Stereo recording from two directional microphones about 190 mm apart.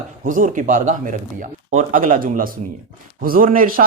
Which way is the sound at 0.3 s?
45° right (ahead or behind).